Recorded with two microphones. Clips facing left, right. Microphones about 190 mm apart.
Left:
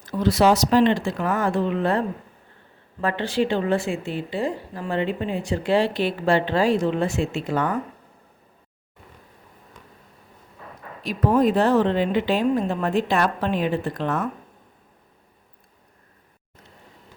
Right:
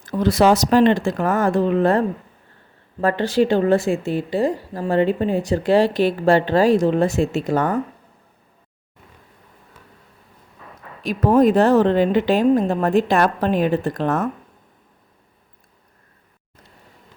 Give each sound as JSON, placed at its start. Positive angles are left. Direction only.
{"t": 0.0, "sound": "a woman's voice", "side_deg": -50}
{"t": 11.0, "sound": "speech", "side_deg": -45}